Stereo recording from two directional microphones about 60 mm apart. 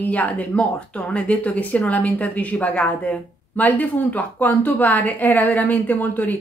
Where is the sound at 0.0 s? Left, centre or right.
Left.